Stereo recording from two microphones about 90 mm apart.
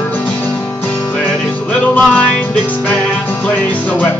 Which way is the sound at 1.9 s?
15° left (ahead or behind).